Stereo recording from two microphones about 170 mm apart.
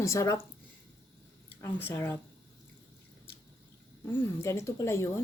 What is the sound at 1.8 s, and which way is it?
Speech, 15° left (ahead or behind).